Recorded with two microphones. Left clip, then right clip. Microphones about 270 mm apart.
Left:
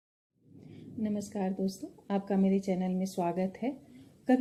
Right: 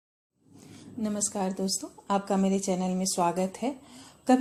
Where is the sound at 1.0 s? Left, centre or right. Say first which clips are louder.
Right 4 dB; centre.